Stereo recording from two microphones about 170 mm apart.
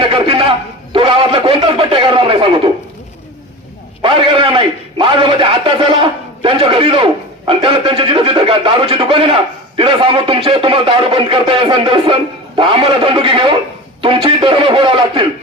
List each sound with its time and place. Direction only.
0.0 s a sound: 30° right (ahead or behind)
0.9 s a man's voice: 30° right (ahead or behind)
4.0 s a man's voice: 30° right (ahead or behind)